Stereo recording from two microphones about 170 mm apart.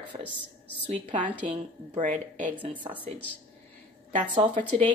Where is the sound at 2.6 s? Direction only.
30° right (ahead or behind).